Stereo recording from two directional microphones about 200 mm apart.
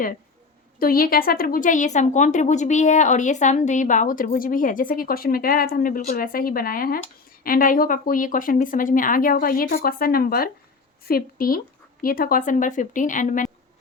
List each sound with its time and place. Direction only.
0.8 s a woman's voice: 45° left (ahead or behind)